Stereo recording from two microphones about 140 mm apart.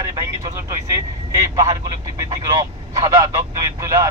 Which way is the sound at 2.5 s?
25° right (ahead or behind).